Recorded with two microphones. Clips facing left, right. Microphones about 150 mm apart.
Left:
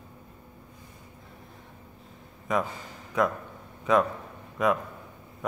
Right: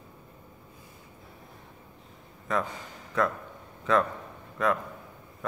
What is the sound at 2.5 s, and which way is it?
A man's voice, 15° left (ahead or behind).